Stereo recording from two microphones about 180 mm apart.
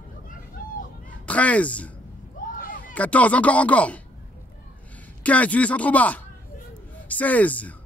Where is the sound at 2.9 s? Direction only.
10° left (ahead or behind).